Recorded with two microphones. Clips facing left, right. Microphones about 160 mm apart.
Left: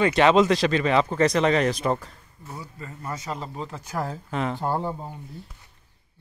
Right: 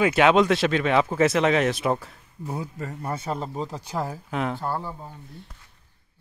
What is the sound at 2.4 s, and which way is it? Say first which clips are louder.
Speech: right 7 dB; 70° right (ahead or behind).